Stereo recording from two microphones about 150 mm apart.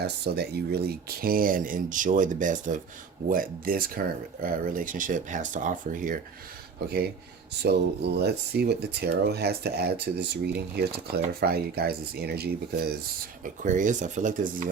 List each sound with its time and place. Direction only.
0.0 s speech: 90° right; by 2.8 s 60° right (ahead or behind)
3.2 s speech: 70° right (ahead or behind)
6.8 s speech: 90° right
13.4 s speech: 60° right (ahead or behind)